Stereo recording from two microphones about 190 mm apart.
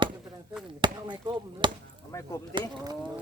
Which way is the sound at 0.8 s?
25° right (ahead or behind).